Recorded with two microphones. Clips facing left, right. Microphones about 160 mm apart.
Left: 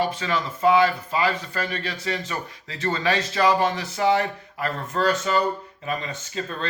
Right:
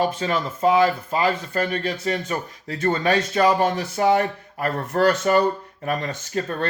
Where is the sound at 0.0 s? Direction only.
45° right (ahead or behind).